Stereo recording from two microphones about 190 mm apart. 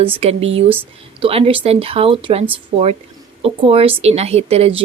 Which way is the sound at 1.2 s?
30° right (ahead or behind).